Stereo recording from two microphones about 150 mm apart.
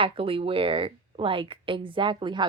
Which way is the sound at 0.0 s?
35° right (ahead or behind).